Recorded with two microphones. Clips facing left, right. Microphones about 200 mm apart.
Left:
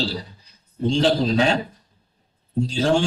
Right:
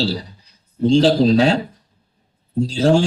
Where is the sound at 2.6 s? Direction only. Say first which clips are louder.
Right 5 dB; 35° right (ahead or behind).